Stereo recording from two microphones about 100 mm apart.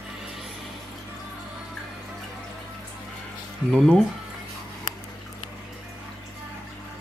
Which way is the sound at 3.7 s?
5° left (ahead or behind).